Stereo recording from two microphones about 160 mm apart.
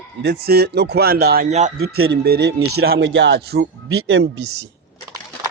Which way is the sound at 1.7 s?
75° right (ahead or behind).